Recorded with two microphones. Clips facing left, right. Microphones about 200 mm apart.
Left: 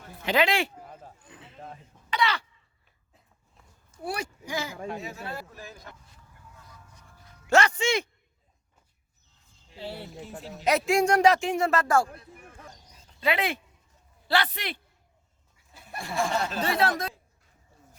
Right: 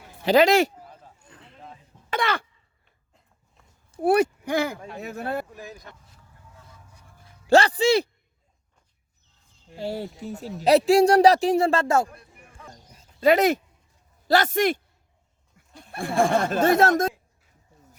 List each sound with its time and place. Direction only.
0.3 s speech: 40° right (ahead or behind)
1.2 s roaring cats: 5° left (ahead or behind)
2.1 s cough: 50° right (ahead or behind)
4.0 s speech: 55° right (ahead or behind)
7.4 s speech: 35° right (ahead or behind)
9.6 s speech: 45° right (ahead or behind); by 12.0 s 25° right (ahead or behind)
13.1 s speech: 45° right (ahead or behind)
15.7 s a sound: 5° left (ahead or behind)
16.0 s speech: 55° right (ahead or behind)